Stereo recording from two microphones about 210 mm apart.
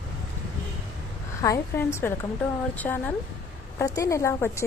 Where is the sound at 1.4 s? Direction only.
15° left (ahead or behind).